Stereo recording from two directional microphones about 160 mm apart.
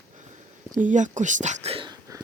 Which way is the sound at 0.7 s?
50° right (ahead or behind).